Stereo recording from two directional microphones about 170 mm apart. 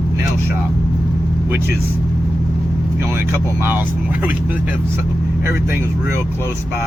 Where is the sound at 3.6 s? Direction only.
10° right (ahead or behind).